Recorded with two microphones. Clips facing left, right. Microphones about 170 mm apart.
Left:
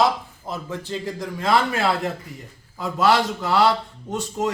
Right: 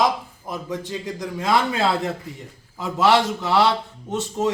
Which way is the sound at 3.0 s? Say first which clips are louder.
Right 1 dB; 20° right (ahead or behind).